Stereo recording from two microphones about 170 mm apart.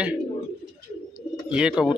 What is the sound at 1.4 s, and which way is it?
Speech, 5° right (ahead or behind).